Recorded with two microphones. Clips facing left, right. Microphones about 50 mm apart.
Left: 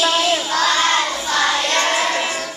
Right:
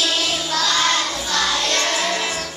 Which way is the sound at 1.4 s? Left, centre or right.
Left.